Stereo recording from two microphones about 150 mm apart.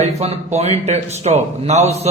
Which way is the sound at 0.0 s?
45° right (ahead or behind).